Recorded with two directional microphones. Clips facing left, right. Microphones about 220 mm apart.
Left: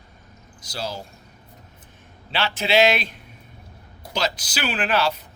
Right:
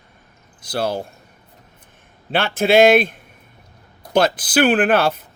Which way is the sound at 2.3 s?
50° right (ahead or behind).